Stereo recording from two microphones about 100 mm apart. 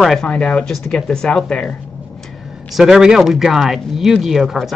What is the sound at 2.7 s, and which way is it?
Speech, 5° right (ahead or behind).